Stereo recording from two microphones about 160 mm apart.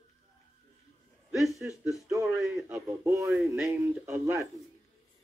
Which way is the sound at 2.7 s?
20° right (ahead or behind).